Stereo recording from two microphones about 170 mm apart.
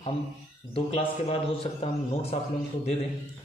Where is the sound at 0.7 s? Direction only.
35° left (ahead or behind).